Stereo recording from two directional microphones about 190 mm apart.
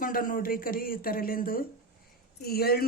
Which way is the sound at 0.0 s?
50° left (ahead or behind).